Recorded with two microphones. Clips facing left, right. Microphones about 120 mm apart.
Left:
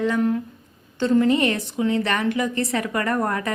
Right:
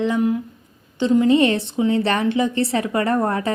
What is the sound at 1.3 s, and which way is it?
A woman's voice, 30° right (ahead or behind).